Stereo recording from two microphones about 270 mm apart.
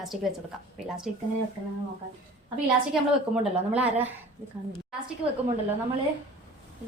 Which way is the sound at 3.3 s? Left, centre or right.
Centre.